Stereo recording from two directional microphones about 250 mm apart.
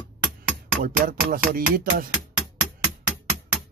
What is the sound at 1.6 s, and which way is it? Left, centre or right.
Speech, right.